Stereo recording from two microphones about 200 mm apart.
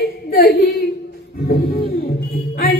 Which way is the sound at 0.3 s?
50° left (ahead or behind).